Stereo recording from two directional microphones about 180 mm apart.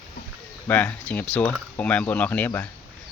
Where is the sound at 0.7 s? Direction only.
10° left (ahead or behind).